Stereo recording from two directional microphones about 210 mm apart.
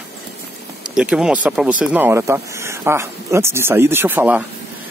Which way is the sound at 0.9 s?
5° right (ahead or behind).